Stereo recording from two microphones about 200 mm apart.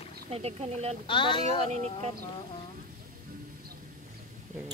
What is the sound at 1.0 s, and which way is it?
Speech, 25° left (ahead or behind).